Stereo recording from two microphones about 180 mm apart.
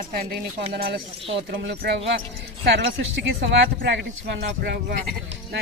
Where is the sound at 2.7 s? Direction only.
80° right.